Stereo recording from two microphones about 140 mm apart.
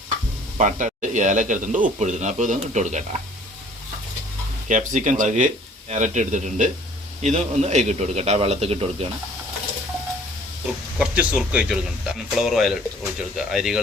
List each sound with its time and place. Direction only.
0.5 s speech: 60° right (ahead or behind)
4.7 s a man's voice: 65° right (ahead or behind); by 9.0 s 45° right (ahead or behind)
10.9 s speech: 10° right (ahead or behind)